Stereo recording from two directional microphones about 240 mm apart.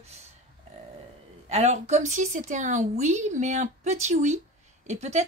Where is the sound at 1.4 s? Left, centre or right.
Right.